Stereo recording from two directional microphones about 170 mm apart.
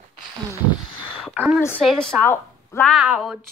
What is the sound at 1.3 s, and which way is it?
Speech, 10° right (ahead or behind).